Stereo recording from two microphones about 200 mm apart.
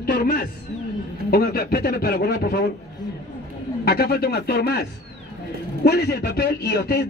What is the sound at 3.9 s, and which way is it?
A man's voice, 50° left (ahead or behind).